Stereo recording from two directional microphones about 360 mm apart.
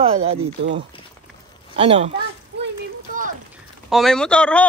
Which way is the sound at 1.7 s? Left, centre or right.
Centre.